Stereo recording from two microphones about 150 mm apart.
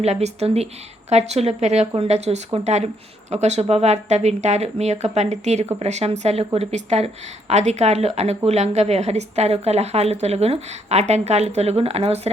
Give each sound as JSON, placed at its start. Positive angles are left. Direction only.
{"t": 0.0, "sound": "a woman's voice", "side_deg": -45}